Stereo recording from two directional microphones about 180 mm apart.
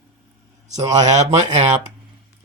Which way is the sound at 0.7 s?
40° right (ahead or behind).